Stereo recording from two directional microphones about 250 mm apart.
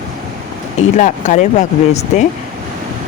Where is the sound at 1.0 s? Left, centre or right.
Left.